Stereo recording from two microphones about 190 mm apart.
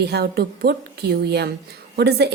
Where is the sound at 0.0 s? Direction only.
60° right (ahead or behind).